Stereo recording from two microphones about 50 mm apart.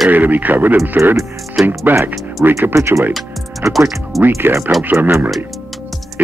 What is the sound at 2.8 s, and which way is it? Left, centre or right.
Speech, right.